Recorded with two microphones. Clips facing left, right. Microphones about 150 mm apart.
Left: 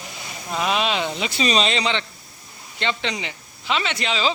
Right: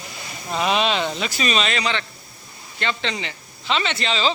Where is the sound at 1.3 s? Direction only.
30° left (ahead or behind).